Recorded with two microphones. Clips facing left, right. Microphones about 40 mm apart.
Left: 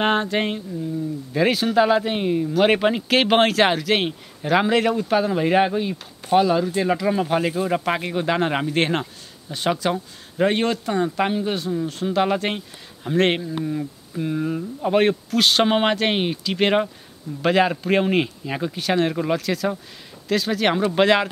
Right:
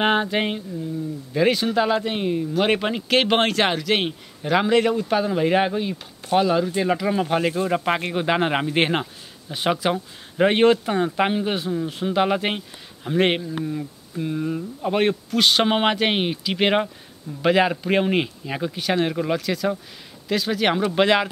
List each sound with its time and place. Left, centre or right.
0.0 s speech: centre
13.4 s speech: centre